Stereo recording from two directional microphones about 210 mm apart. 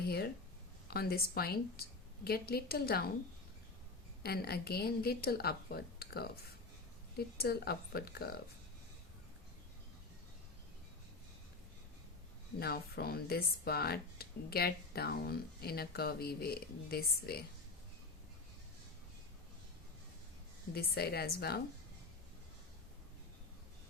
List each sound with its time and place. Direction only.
0.9 s speech: 45° left (ahead or behind)
4.2 s speech: 50° left (ahead or behind)
12.5 s speech: 50° left (ahead or behind)
20.7 s speech: 50° left (ahead or behind)